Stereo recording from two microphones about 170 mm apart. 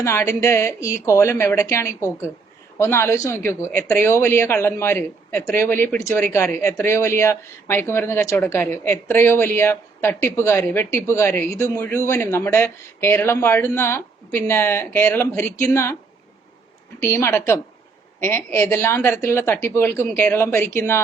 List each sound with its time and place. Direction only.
0.0 s speech: 15° left (ahead or behind)
17.0 s speech: 15° left (ahead or behind)